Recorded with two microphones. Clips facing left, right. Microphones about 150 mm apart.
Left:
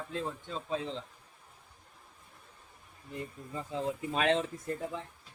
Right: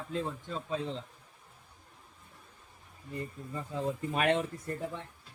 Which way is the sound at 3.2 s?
15° left (ahead or behind).